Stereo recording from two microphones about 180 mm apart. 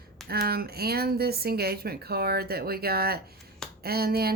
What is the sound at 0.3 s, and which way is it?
Speech, 60° right (ahead or behind).